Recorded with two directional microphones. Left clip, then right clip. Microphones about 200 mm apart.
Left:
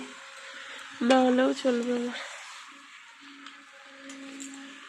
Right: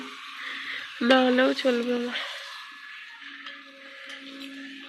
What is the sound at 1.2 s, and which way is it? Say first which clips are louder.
Speech: right 2 dB; 15° left (ahead or behind).